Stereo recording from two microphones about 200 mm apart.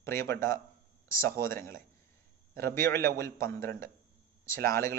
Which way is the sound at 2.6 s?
10° left (ahead or behind).